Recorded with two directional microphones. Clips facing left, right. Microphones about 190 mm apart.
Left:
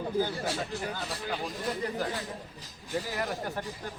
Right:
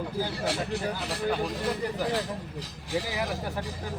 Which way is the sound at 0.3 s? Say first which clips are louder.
Right 3 dB; 70° right (ahead or behind).